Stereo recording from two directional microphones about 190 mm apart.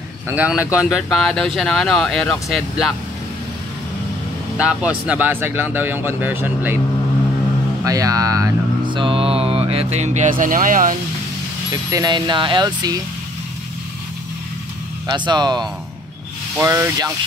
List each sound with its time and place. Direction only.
0.3 s speech: 5° right (ahead or behind)
4.6 s speech: 5° right (ahead or behind)
7.8 s speech: 20° right (ahead or behind); by 11.0 s 45° right (ahead or behind)
11.7 s speech: 20° right (ahead or behind)
15.0 s speech: 20° right (ahead or behind)